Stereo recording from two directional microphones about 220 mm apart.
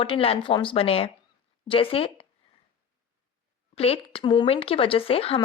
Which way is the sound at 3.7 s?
25° left (ahead or behind).